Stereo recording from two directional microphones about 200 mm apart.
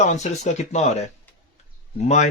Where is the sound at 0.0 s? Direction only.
35° left (ahead or behind).